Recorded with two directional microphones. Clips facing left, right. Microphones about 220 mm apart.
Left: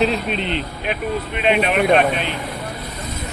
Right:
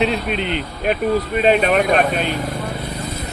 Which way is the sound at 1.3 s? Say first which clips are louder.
Right 2 dB; 40° right (ahead or behind).